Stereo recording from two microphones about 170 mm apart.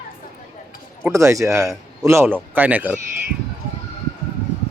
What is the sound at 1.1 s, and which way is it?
Speech, 20° right (ahead or behind).